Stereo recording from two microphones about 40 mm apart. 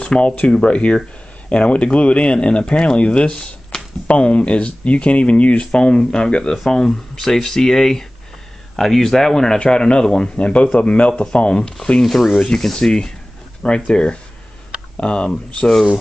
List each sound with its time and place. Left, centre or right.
0.0 s speech: left
3.7 s a sound: centre
4.1 s speech: left
11.6 s speech: centre
13.6 s speech: left